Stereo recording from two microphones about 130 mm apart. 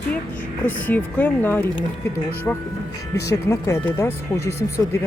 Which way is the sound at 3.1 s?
25° left (ahead or behind).